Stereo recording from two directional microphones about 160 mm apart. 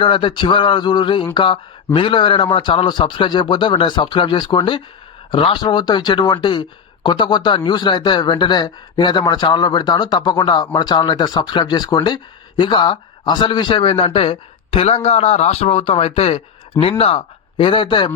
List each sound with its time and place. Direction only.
0.0 s speech: 35° left (ahead or behind)